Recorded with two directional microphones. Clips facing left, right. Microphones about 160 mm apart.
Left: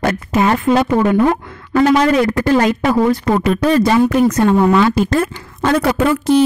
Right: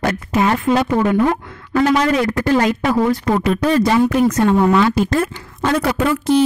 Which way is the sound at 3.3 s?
50° left (ahead or behind).